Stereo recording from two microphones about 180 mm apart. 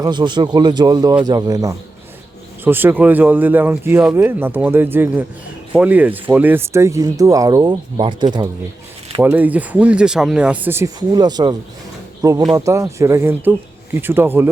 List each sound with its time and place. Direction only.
0.0 s a man's voice: 25° right (ahead or behind)
9.2 s speech: 10° right (ahead or behind)